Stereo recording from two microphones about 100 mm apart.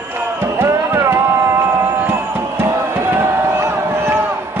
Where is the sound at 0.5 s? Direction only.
30° right (ahead or behind).